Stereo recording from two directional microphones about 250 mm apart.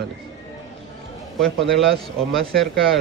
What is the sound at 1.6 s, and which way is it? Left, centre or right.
Speech, centre.